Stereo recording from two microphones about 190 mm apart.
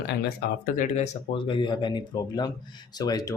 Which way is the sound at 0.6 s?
40° left (ahead or behind).